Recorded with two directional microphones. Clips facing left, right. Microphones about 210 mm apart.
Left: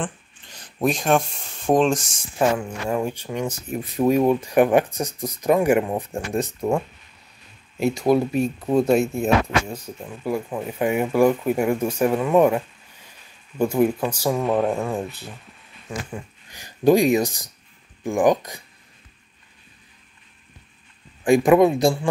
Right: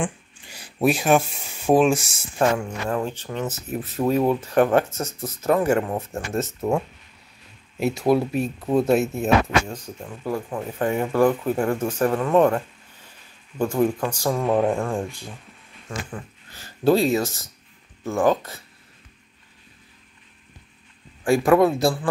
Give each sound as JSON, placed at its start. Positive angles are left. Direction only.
{"t": 0.0, "sound": "speech", "side_deg": -10}
{"t": 2.6, "sound": "speech", "side_deg": 10}
{"t": 7.7, "sound": "speech", "side_deg": -5}
{"t": 9.7, "sound": "speech", "side_deg": 10}
{"t": 16.1, "sound": "speech", "side_deg": 15}
{"t": 21.5, "sound": "speech", "side_deg": 15}